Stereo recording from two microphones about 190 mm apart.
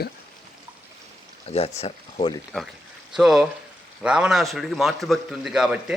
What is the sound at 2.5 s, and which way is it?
A man's voice, 5° left (ahead or behind).